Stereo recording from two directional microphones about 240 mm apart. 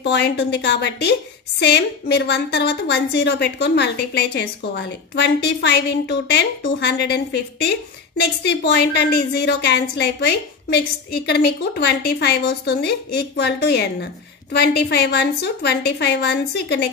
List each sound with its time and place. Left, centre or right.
0.0 s a woman's voice: left